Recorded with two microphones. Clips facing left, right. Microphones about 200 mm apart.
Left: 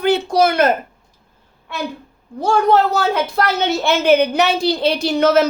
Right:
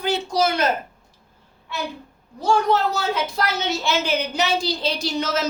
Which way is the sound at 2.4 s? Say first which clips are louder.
Left 5 dB; 55° left (ahead or behind).